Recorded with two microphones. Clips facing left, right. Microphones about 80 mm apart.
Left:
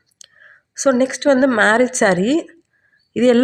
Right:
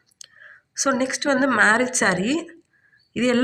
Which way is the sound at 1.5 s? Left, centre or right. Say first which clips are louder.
Left 4 dB; left.